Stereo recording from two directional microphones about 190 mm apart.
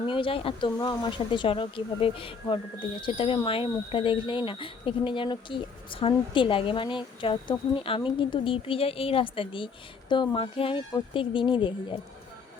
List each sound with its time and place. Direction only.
0.0 s speech: 25° left (ahead or behind)